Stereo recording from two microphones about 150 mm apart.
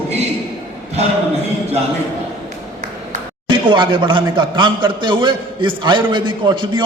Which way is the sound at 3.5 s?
35° right (ahead or behind).